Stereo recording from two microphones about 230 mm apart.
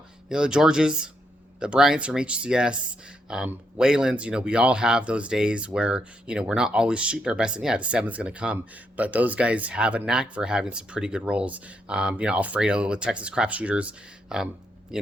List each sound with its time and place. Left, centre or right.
0.3 s speech: centre